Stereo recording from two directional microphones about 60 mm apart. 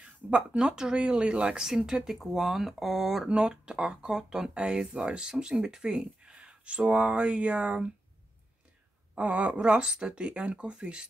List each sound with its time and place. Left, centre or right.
0.0 s speech: centre
3.3 s speech: centre
9.1 s speech: centre